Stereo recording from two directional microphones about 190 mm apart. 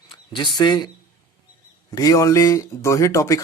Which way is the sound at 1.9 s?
20° left (ahead or behind).